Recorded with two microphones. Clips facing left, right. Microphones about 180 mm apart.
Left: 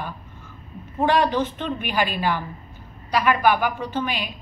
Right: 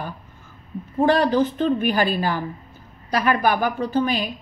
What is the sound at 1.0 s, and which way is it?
A woman's voice, 40° right (ahead or behind).